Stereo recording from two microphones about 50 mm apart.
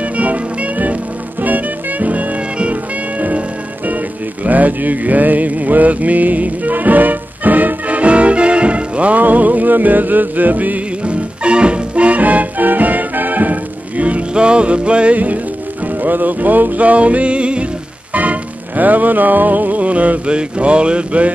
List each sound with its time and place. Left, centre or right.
0.0 s music: right
11.1 s music: right